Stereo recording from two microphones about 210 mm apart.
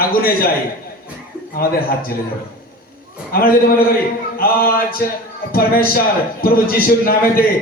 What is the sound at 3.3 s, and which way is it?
A man's voice, 45° left (ahead or behind).